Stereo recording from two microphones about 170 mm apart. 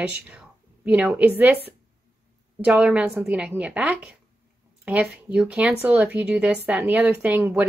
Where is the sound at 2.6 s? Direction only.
5° right (ahead or behind).